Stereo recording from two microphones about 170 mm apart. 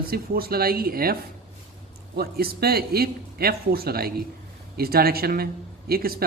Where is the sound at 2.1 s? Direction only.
65° right (ahead or behind).